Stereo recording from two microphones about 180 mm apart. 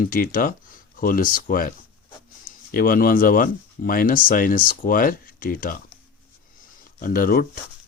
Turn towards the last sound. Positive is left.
turn(degrees=55)  # may be behind; listen again after turning